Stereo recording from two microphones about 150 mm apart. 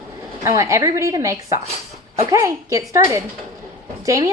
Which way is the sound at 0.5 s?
20° right (ahead or behind).